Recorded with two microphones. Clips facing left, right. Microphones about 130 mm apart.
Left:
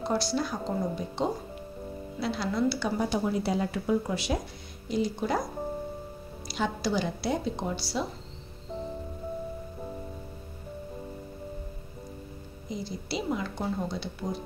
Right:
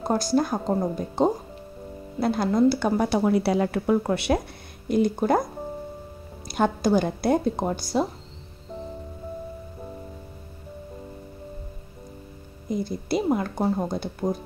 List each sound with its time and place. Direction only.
0.0 s a woman's voice: 45° right (ahead or behind)
3.0 s a woman's voice: 70° right (ahead or behind); by 8.1 s 50° right (ahead or behind)
12.6 s a woman's voice: 55° right (ahead or behind)